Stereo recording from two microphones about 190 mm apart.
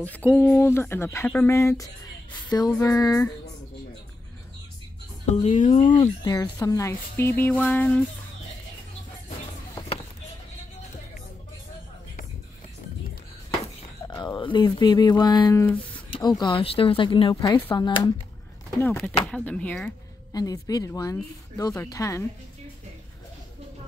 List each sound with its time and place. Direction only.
0.0 s speech: 10° left (ahead or behind)
5.2 s speech: 35° left (ahead or behind)
5.9 s speech: 20° left (ahead or behind)
14.0 s speech: 20° left (ahead or behind)
15.6 s speech: 10° left (ahead or behind)
16.2 s speech: 20° left (ahead or behind)
18.8 s speech: 10° left (ahead or behind)
20.3 s speech: 20° left (ahead or behind)